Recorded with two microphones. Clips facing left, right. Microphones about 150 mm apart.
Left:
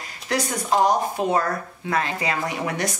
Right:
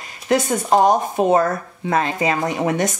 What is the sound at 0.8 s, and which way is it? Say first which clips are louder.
Speech: right 5 dB; 20° right (ahead or behind).